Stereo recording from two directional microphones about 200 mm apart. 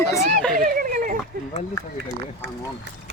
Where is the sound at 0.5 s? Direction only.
45° right (ahead or behind).